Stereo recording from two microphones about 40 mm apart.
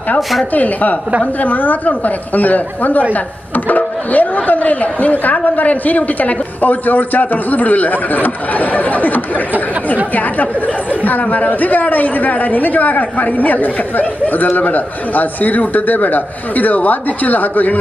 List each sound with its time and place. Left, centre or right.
0.2 s speech: centre
0.5 s a man's voice: left